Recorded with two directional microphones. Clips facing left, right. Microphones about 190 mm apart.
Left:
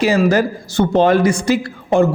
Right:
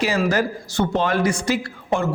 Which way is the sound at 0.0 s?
20° left (ahead or behind).